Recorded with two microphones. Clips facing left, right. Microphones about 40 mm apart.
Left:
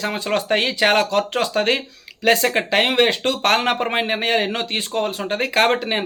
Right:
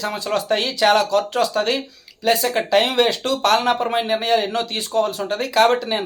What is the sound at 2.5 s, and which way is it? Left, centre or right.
Speech, left.